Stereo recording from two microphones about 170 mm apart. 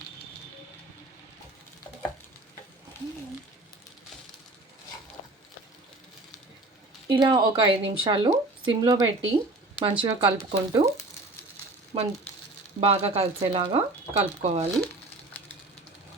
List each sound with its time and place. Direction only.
7.1 s speech: 25° right (ahead or behind)
11.9 s speech: 30° right (ahead or behind)